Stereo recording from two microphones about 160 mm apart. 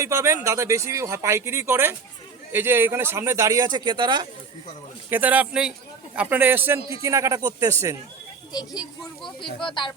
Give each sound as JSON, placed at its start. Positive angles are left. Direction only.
{"t": 0.0, "sound": "speech", "side_deg": -20}
{"t": 5.0, "sound": "speech", "side_deg": -10}
{"t": 9.6, "sound": "speech", "side_deg": 30}